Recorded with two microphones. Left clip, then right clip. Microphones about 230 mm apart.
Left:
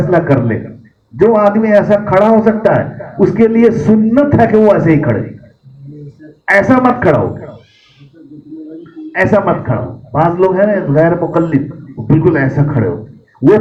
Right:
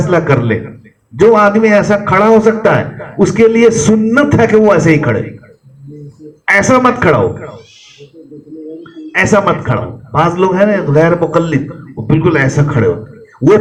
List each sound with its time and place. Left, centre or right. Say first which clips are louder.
0.1 s a man's voice: right 1 dB; right
6.4 s a man's voice: right 1 dB; right
9.1 s a man's voice: right 1 dB; right
13.4 s a sound: right 1 dB; right